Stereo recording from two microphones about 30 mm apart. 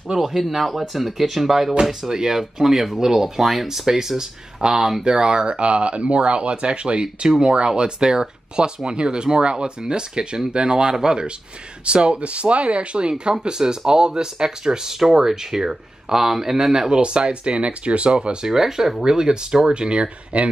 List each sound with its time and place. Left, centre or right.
0.1 s speech: centre
0.5 s speech: centre
1.9 s speech: centre; by 7.2 s right
7.2 s speech: right
11.8 s speech: right
13.4 s speech: right
16.9 s speech: right
18.5 s speech: centre
19.7 s speech: right
20.3 s speech: right